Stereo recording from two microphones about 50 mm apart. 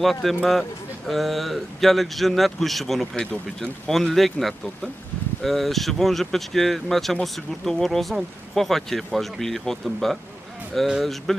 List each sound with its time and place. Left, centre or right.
0.0 s speech: centre
3.2 s speech: centre
3.9 s speech: centre